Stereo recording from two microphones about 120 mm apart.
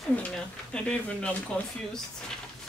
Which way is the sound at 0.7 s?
10° left (ahead or behind).